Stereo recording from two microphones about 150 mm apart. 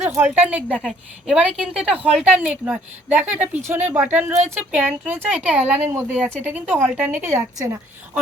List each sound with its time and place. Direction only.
0.3 s a woman's voice: 10° right (ahead or behind)